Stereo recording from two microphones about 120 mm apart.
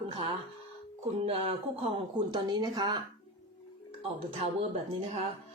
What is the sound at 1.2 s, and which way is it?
Speech, 50° right (ahead or behind).